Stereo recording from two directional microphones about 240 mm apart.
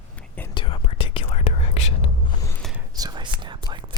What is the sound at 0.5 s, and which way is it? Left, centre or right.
Whispering, left.